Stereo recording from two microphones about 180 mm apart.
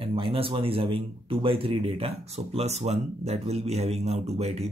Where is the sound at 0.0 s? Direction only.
30° right (ahead or behind).